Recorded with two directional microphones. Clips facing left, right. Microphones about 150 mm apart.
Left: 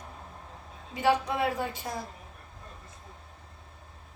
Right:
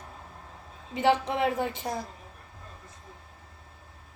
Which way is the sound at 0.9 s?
20° right (ahead or behind).